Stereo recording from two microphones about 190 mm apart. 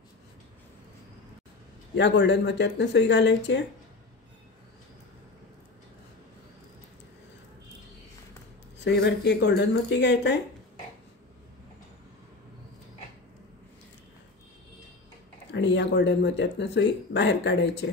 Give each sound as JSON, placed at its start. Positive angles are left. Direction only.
{"t": 2.0, "sound": "speech", "side_deg": 65}
{"t": 8.8, "sound": "speech", "side_deg": 65}
{"t": 15.5, "sound": "speech", "side_deg": 70}